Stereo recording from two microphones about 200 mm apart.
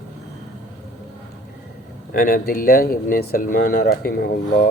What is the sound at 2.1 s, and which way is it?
Speech, 45° left (ahead or behind).